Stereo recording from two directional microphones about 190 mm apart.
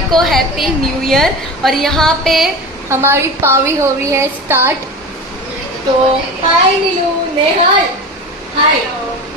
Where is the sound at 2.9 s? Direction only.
15° right (ahead or behind).